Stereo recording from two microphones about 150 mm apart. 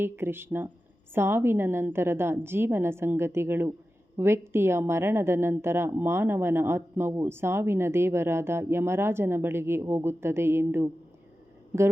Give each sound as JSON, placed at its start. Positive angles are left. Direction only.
{"t": 0.0, "sound": "a woman's voice", "side_deg": -15}